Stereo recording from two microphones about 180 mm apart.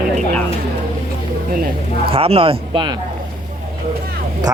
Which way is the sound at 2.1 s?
30° right (ahead or behind).